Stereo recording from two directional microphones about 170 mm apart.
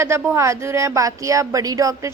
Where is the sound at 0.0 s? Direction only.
15° right (ahead or behind).